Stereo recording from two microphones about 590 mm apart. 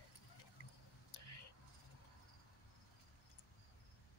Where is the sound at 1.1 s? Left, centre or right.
Left.